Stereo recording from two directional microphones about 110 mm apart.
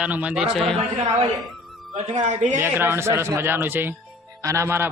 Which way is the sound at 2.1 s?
90° right.